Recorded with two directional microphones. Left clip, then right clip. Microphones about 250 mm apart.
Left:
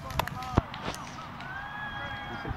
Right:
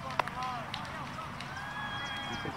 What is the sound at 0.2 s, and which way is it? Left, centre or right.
Run, left.